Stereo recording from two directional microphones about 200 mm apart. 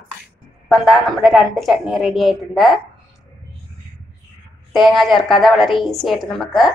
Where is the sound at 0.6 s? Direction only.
Centre (ahead or behind).